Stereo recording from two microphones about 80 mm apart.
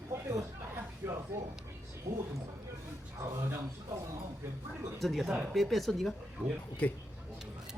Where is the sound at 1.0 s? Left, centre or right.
Right.